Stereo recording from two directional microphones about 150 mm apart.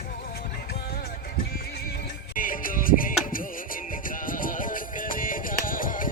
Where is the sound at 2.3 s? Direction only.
65° left (ahead or behind).